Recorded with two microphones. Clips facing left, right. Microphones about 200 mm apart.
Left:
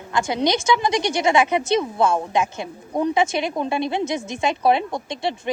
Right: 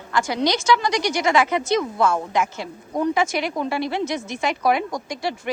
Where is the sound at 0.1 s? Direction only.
20° left (ahead or behind).